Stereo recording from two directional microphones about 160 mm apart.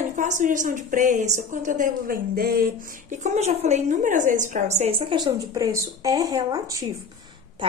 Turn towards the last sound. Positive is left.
turn(degrees=-20)  # may be behind; listen again after turning